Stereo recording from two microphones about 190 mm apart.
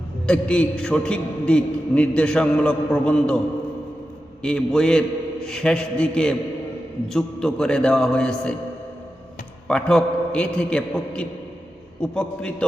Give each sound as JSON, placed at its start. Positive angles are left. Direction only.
{"t": 0.3, "sound": "a man's voice", "side_deg": 5}
{"t": 4.4, "sound": "a man's voice", "side_deg": 5}
{"t": 9.6, "sound": "a man's voice", "side_deg": 5}